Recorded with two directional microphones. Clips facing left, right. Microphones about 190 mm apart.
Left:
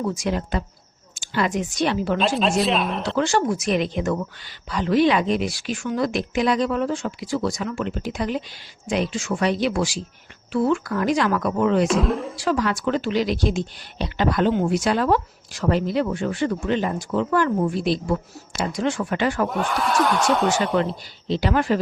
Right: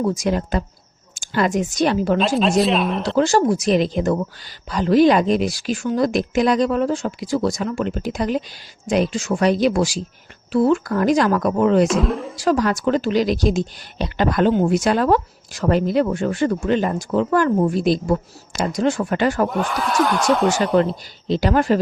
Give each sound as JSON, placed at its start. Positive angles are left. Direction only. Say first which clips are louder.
{"t": 0.1, "sound": "a woman's voice", "louder": "right 4 dB", "side_deg": -40}
{"t": 2.1, "sound": "speech", "louder": "right 4 dB", "side_deg": 0}
{"t": 3.2, "sound": "speech", "louder": "right 5 dB", "side_deg": -40}
{"t": 11.9, "sound": "speech", "louder": "right 1 dB", "side_deg": 0}
{"t": 12.4, "sound": "speech", "louder": "right 7 dB", "side_deg": -40}
{"t": 19.5, "sound": "speech", "louder": "right 1 dB", "side_deg": 0}
{"t": 21.2, "sound": "speech", "louder": "right 4 dB", "side_deg": -45}